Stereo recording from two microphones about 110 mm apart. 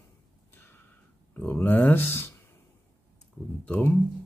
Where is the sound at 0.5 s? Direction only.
20° left (ahead or behind).